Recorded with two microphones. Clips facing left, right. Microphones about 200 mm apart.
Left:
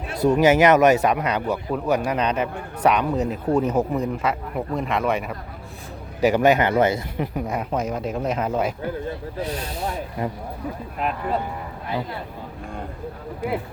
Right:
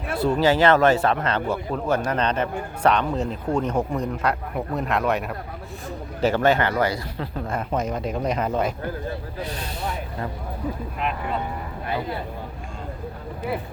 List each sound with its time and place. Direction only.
0.3 s a man's voice: 20° left (ahead or behind); by 5.4 s centre (ahead or behind)
6.2 s a man's voice: 15° left (ahead or behind)